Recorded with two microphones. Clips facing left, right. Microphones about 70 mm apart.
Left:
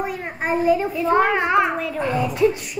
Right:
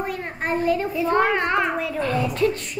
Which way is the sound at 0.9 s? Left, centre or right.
Centre.